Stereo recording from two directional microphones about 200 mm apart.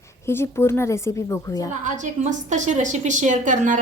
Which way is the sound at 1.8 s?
40° right (ahead or behind).